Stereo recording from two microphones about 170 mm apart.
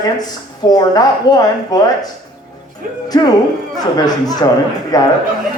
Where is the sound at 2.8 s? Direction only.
55° right (ahead or behind).